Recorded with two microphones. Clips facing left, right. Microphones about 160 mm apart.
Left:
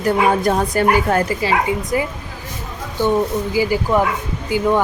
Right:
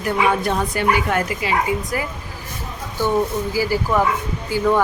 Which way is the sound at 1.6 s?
20° left (ahead or behind).